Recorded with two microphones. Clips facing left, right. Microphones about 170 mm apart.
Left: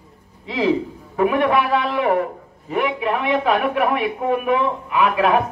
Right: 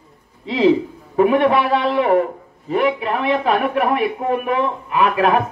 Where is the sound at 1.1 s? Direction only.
30° right (ahead or behind).